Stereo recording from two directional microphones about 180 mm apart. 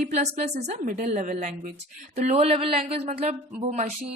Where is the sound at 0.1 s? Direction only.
40° right (ahead or behind).